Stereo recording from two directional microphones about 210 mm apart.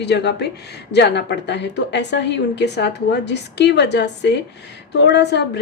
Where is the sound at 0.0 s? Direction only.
55° left (ahead or behind).